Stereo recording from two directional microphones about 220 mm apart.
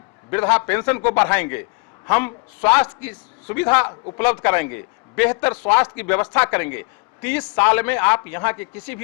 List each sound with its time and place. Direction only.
0.3 s a man's voice: 10° left (ahead or behind)